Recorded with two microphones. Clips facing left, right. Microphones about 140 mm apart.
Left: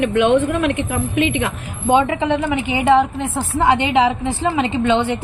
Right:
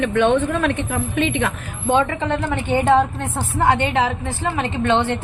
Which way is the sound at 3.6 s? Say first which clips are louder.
Left 3 dB; 15° left (ahead or behind).